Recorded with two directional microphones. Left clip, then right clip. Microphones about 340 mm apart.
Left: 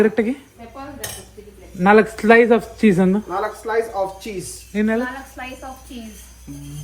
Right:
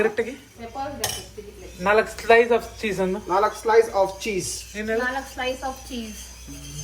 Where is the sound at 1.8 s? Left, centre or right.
Centre.